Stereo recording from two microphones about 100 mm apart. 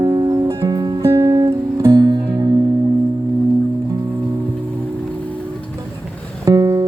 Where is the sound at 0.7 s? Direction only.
45° right (ahead or behind).